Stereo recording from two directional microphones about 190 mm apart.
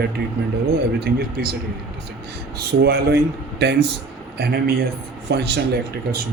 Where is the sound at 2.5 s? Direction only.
60° right (ahead or behind).